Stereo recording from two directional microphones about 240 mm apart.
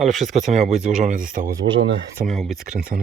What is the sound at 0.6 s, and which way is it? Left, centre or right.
Speech, right.